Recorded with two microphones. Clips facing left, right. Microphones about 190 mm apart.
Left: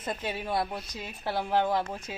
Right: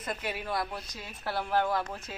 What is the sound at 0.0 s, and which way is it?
A woman's voice, 25° left (ahead or behind).